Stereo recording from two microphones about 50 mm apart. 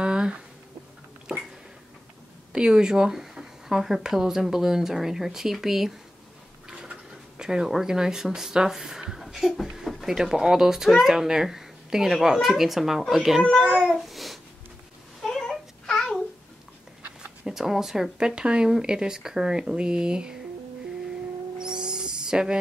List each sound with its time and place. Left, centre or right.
0.0 s a sound: centre
2.5 s speech: centre
6.7 s speech: centre
9.0 s a sound: centre
9.8 s a sound: centre
10.1 s speech: centre
13.4 s speech: left
13.9 s babbling: centre
15.2 s a sound: centre
15.9 s babbling: centre
17.5 s speech: centre
21.5 s owl: centre